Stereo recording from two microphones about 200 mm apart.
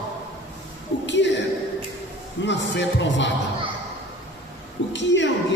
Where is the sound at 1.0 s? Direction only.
60° left (ahead or behind).